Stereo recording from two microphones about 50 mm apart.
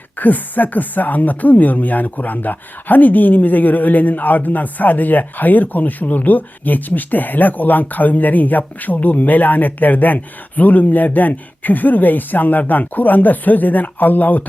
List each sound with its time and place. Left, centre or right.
0.2 s speech: left